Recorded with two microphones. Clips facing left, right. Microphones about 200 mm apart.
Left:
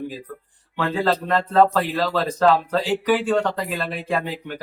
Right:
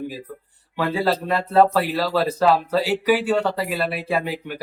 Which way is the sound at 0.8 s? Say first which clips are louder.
Even; 10° right (ahead or behind).